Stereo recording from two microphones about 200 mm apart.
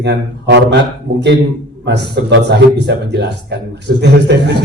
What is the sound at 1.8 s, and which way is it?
A man's voice, 60° right (ahead or behind).